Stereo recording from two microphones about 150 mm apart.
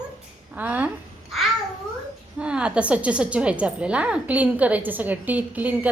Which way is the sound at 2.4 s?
5° right (ahead or behind).